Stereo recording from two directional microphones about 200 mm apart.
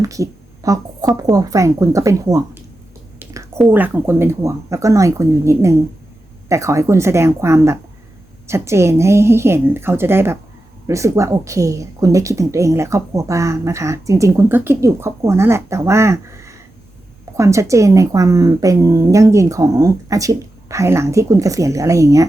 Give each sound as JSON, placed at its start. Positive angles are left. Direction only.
{"t": 0.0, "sound": "speech", "side_deg": -15}